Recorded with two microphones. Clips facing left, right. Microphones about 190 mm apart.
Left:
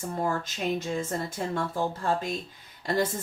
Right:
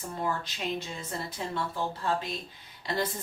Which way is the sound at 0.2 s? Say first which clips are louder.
Left 3 dB; 45° left (ahead or behind).